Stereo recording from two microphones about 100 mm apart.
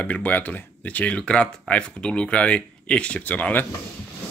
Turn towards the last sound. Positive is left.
turn(degrees=15)  # may be behind; listen again after turning